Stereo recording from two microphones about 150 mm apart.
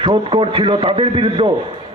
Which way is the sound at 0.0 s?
35° right (ahead or behind).